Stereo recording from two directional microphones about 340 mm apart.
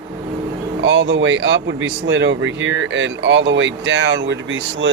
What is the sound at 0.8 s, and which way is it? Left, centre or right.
Speech, right.